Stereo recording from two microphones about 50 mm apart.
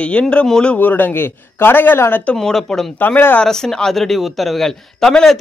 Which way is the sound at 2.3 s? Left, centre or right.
Centre.